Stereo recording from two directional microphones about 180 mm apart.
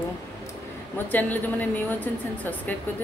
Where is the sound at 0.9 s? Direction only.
10° left (ahead or behind).